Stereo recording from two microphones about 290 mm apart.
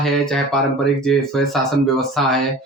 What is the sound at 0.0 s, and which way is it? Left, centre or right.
Speech, centre.